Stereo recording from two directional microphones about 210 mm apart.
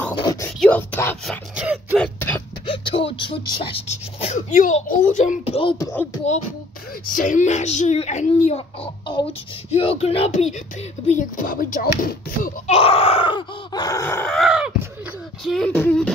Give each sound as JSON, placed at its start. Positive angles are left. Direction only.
{"t": 0.2, "sound": "whispering", "side_deg": 15}
{"t": 0.6, "sound": "speech", "side_deg": 5}
{"t": 1.5, "sound": "speech", "side_deg": -5}
{"t": 2.0, "sound": "a sound", "side_deg": 10}
{"t": 2.6, "sound": "speech", "side_deg": 25}
{"t": 6.2, "sound": "a child's voice", "side_deg": 35}
{"t": 12.7, "sound": "groan", "side_deg": 25}
{"t": 15.4, "sound": "speech", "side_deg": 0}